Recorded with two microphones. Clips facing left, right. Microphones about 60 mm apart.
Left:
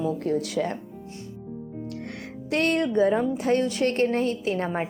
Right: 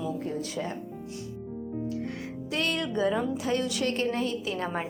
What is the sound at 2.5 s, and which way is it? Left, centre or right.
A woman's voice, left.